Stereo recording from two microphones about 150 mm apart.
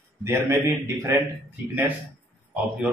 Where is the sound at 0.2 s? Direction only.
15° right (ahead or behind).